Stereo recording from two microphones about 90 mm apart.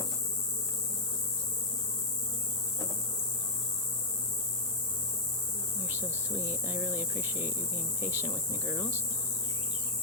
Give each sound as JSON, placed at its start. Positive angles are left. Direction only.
{"t": 5.8, "sound": "cricket", "side_deg": -25}